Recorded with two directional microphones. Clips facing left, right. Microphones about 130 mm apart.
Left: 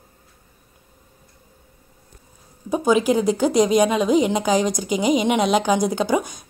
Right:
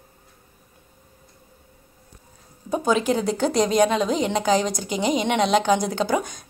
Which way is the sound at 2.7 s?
10° left (ahead or behind).